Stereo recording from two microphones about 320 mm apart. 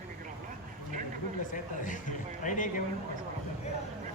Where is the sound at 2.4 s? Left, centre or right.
Left.